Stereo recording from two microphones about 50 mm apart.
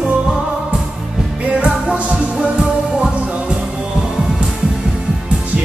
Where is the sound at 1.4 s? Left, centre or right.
Right.